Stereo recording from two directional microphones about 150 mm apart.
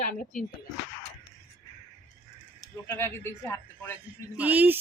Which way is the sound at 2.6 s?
20° left (ahead or behind).